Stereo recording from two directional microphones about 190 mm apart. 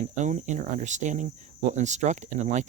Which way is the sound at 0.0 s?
40° right (ahead or behind).